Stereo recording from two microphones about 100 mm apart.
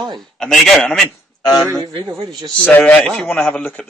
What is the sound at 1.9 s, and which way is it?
Speech, 50° right (ahead or behind).